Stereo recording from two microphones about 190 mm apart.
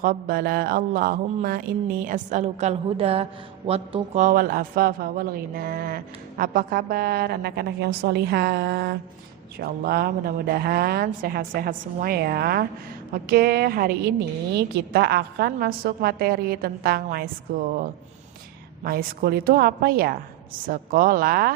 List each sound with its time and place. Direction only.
0.0 s a man's voice: 50° right (ahead or behind)
18.9 s a man's voice: 55° right (ahead or behind)